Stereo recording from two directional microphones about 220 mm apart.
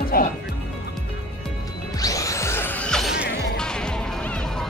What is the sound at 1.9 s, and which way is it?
Music, 15° left (ahead or behind).